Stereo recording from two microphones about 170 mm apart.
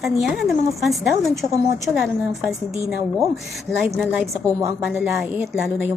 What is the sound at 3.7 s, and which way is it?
A woman's voice, centre (ahead or behind).